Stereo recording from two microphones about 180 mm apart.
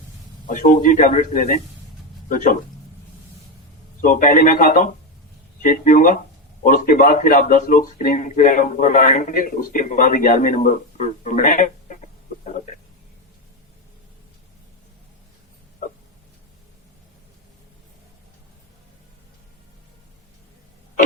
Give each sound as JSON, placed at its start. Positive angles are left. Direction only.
{"t": 0.4, "sound": "a man's voice", "side_deg": 45}
{"t": 4.0, "sound": "a man's voice", "side_deg": 50}